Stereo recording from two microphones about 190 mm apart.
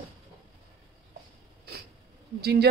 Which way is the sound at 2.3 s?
55° right (ahead or behind).